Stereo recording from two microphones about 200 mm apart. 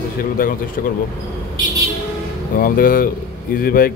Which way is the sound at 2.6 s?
45° left (ahead or behind).